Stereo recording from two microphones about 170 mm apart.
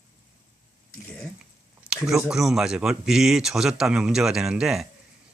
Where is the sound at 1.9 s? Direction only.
5° right (ahead or behind).